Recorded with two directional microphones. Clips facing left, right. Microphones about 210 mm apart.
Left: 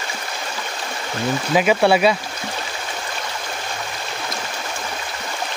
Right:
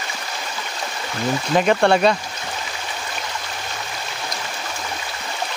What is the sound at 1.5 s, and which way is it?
Speech, 5° left (ahead or behind).